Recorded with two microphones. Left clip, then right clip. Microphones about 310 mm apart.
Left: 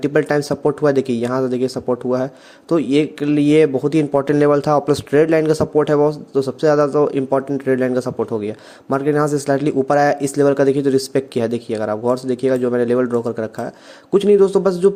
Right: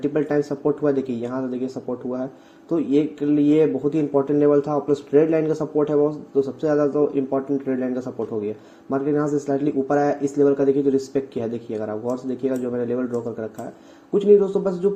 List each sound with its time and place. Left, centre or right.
0.0 s a man's voice: left